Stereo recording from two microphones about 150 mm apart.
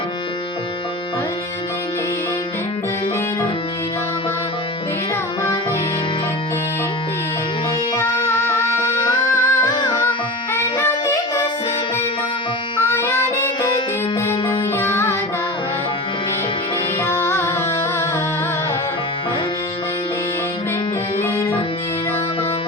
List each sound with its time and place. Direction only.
9.2 s music: 30° left (ahead or behind)
10.5 s music: 20° left (ahead or behind)
14.2 s music: 20° left (ahead or behind)
17.0 s music: 15° left (ahead or behind)